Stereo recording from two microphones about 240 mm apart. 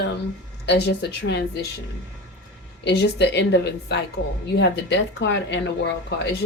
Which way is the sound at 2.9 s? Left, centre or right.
Left.